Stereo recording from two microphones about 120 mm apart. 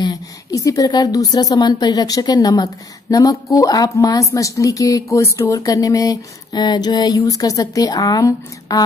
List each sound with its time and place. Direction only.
0.0 s a woman's voice: 30° left (ahead or behind)